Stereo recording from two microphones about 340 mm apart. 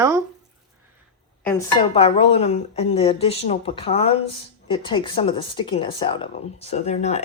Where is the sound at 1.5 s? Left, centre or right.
Centre.